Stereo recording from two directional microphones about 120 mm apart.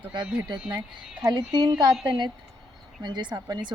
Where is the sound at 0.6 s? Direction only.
5° right (ahead or behind).